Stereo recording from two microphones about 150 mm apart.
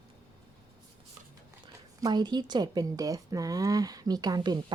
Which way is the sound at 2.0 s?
30° right (ahead or behind).